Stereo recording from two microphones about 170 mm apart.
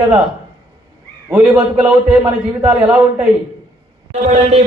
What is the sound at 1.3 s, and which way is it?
A man's voice, 10° right (ahead or behind).